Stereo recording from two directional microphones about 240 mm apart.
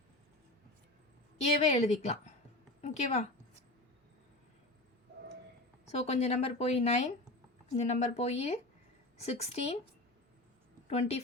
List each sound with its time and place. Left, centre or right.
1.6 s speech: left
5.9 s speech: left
10.8 s speech: left